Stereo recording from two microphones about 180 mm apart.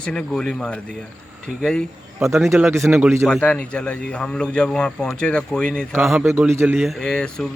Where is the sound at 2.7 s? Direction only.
15° right (ahead or behind).